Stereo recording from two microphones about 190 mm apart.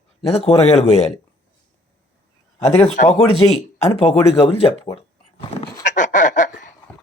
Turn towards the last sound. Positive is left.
turn(degrees=40)  # may be behind; listen again after turning